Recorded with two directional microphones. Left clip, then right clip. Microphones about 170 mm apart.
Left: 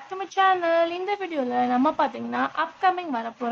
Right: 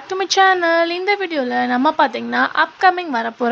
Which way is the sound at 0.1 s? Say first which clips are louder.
Right 7 dB; 25° right (ahead or behind).